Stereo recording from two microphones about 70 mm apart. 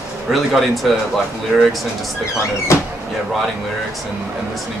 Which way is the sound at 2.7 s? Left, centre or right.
Left.